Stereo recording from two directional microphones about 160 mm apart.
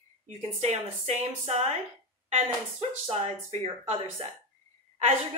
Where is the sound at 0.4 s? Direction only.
45° right (ahead or behind).